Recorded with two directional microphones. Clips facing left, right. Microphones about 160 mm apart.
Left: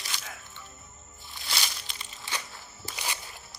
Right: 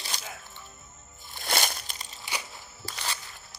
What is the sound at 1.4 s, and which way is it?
Crushing, 50° right (ahead or behind).